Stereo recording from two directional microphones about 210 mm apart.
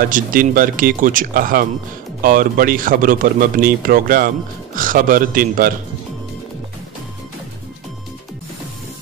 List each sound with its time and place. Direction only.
0.0 s speech: 40° right (ahead or behind)